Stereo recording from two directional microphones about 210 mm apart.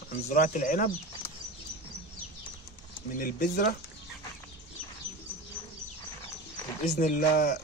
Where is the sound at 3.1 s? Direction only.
40° left (ahead or behind).